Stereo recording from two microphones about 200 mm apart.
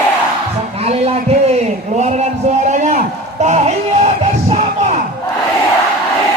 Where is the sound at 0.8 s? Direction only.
30° right (ahead or behind).